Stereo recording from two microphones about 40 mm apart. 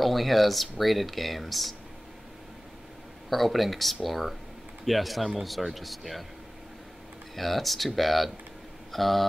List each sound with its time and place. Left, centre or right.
0.0 s speech: centre
3.3 s speech: centre
7.3 s speech: centre